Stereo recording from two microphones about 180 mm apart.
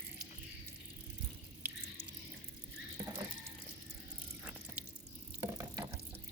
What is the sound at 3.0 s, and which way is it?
Ratchet, 30° right (ahead or behind).